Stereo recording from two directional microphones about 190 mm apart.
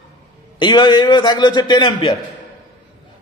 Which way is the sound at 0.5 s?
25° left (ahead or behind).